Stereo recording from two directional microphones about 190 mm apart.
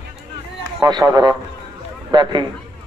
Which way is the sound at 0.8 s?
20° right (ahead or behind).